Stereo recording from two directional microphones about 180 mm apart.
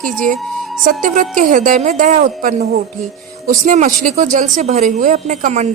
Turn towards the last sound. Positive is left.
turn(degrees=-40)  # may be behind; listen again after turning